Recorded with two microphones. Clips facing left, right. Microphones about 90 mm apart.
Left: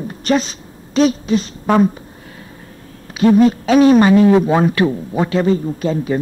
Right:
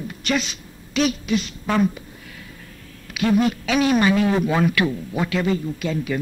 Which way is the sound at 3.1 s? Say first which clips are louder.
Left 8 dB; 35° left (ahead or behind).